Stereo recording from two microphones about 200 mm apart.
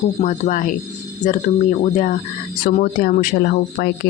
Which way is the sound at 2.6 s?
45° left (ahead or behind).